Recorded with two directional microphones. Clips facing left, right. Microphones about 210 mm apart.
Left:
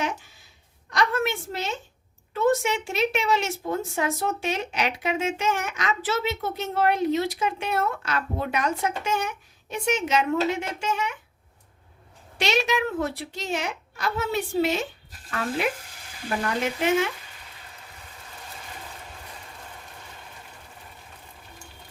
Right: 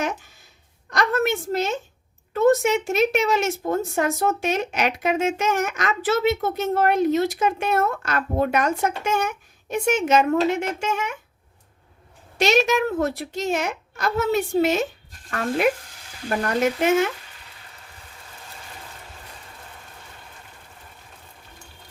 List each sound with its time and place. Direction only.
0.9 s a sound: 45° right (ahead or behind)
2.3 s speech: 45° right (ahead or behind)
12.4 s speech: 45° right (ahead or behind)